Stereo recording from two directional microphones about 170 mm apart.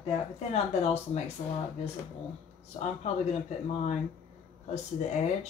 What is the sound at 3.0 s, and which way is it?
Speech, 40° left (ahead or behind).